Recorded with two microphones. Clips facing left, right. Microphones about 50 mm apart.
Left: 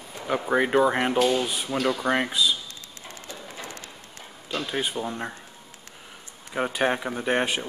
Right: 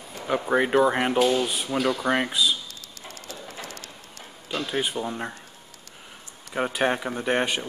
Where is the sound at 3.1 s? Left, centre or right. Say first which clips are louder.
Even; centre.